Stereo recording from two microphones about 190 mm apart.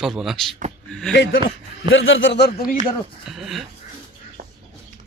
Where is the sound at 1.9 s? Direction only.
85° left; by 2.5 s 65° left (ahead or behind).